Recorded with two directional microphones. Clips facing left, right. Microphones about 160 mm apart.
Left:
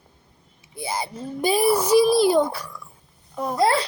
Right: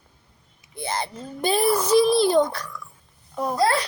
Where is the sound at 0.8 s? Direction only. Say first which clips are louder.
Even; 10° left (ahead or behind).